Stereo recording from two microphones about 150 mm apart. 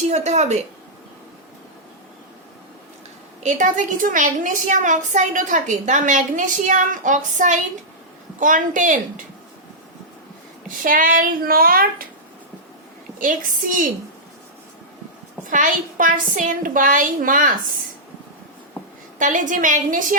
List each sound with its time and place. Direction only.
0.1 s a woman's voice: 50° right (ahead or behind)
3.4 s a woman's voice: 55° right (ahead or behind)
10.8 s speech: 65° right (ahead or behind)
13.1 s a woman's voice: 60° right (ahead or behind)
15.4 s a woman's voice: 60° right (ahead or behind)
19.2 s a woman's voice: 60° right (ahead or behind)